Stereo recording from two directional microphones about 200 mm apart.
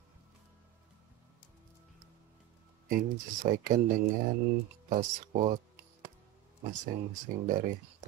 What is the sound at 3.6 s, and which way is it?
Speech, 45° right (ahead or behind).